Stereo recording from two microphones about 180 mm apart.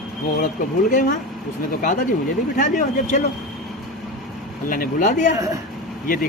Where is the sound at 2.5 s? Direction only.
45° left (ahead or behind).